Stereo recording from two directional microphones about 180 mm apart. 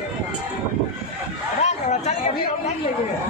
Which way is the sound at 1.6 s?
40° left (ahead or behind).